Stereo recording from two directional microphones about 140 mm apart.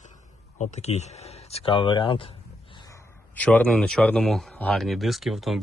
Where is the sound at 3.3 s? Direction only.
10° left (ahead or behind).